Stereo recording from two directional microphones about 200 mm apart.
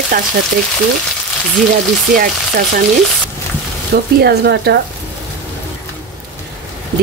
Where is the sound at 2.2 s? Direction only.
45° right (ahead or behind).